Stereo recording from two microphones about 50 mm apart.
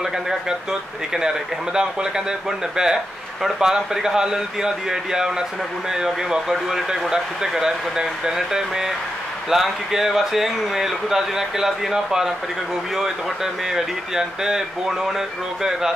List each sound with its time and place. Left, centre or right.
0.0 s speech: centre